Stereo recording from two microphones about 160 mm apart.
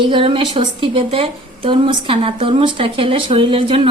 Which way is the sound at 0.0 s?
35° right (ahead or behind).